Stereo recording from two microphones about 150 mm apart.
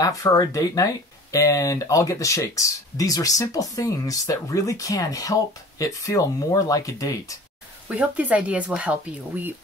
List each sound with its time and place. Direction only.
0.0 s speech: 25° left (ahead or behind)
7.9 s speech: 10° right (ahead or behind)